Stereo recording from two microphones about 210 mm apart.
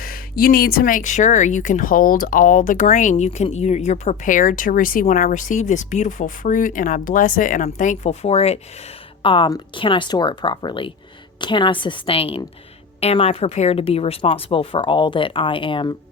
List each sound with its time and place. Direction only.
0.0 s speech: 45° left (ahead or behind); by 16.0 s 25° left (ahead or behind)